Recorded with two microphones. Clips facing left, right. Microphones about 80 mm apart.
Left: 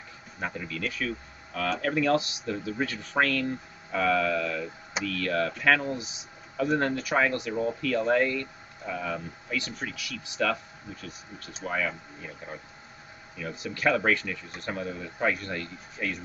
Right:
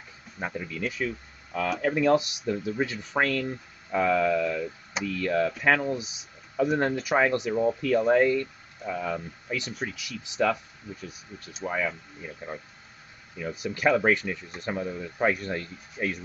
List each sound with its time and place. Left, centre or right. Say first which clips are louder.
0.7 s speech: right 1 dB; centre
13.4 s speech: right 3 dB; centre